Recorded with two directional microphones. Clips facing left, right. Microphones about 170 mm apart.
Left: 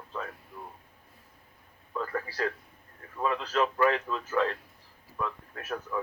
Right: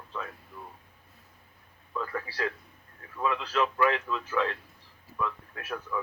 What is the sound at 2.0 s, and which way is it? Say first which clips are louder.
Speech: left 1 dB; 40° left (ahead or behind).